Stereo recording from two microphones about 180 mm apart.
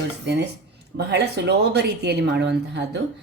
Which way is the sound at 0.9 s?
65° right (ahead or behind).